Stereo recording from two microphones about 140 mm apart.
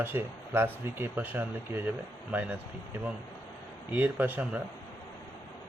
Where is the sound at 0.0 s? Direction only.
15° right (ahead or behind).